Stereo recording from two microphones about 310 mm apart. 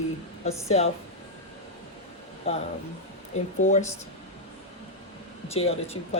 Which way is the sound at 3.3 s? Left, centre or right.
Left.